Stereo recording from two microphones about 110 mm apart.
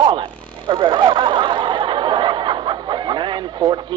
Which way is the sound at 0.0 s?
40° right (ahead or behind).